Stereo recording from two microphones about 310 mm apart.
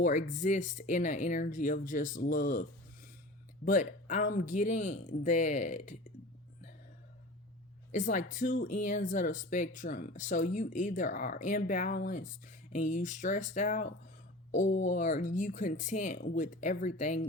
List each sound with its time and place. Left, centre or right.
0.0 s speech: left
3.7 s speech: left
7.9 s speech: left